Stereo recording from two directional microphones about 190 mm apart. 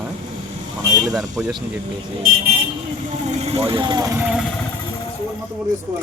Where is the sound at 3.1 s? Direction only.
35° right (ahead or behind); by 4.2 s 20° right (ahead or behind).